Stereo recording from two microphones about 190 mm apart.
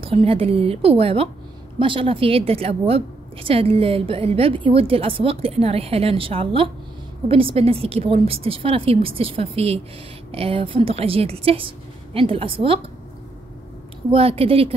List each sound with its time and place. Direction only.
0.0 s a woman's voice: 30° right (ahead or behind)
14.1 s a woman's voice: 30° right (ahead or behind)